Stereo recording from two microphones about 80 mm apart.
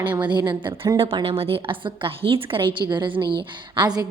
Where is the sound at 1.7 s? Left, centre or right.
Right.